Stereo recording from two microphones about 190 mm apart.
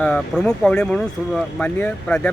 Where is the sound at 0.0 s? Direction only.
5° left (ahead or behind).